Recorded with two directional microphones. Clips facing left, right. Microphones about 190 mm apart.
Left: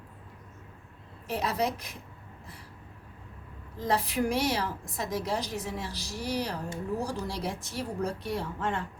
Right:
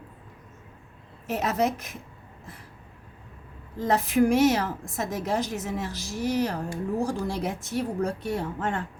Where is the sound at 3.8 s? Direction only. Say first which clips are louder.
Right 6 dB; 50° right (ahead or behind).